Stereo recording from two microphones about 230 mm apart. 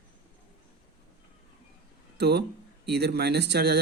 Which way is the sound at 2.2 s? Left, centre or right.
Right.